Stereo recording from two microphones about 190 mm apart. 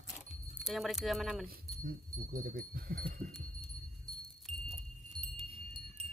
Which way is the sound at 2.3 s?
50° right (ahead or behind).